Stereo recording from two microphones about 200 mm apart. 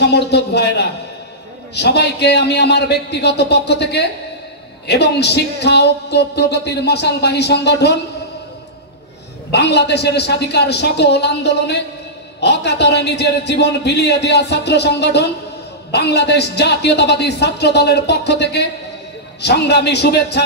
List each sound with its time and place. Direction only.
0.0 s speech: 55° left (ahead or behind)
9.5 s speech: 55° left (ahead or behind)